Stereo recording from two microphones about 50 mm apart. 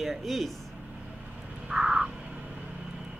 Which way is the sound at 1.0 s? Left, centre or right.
Centre.